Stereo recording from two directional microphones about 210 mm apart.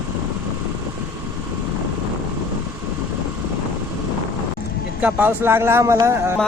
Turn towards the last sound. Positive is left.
turn(degrees=-10)  # may be behind; listen again after turning